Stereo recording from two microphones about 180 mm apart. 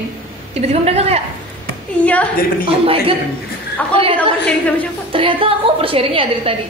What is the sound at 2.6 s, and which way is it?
A woman's voice, 30° right (ahead or behind).